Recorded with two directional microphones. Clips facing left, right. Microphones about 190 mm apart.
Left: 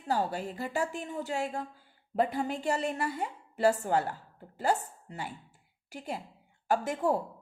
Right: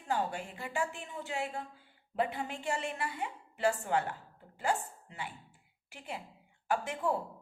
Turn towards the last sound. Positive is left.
turn(degrees=40)  # may be behind; listen again after turning